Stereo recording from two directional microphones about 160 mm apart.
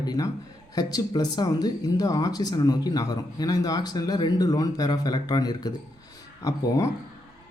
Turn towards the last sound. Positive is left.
turn(degrees=20)  # may be behind; listen again after turning